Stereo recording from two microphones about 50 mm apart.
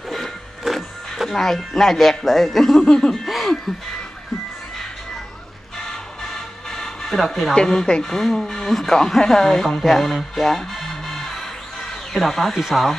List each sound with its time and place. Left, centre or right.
0.1 s music: centre
1.3 s a man's voice: centre
5.9 s music: centre
7.5 s a man's voice: centre